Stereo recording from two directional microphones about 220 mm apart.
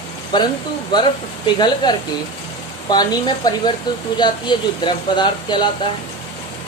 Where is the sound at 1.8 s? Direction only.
20° left (ahead or behind).